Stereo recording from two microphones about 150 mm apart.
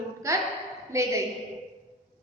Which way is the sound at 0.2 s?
20° right (ahead or behind).